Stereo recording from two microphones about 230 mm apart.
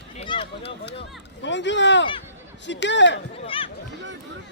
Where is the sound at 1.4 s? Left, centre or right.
Left.